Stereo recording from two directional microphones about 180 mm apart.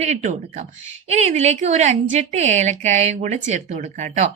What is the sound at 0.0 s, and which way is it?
A woman's voice, 40° right (ahead or behind).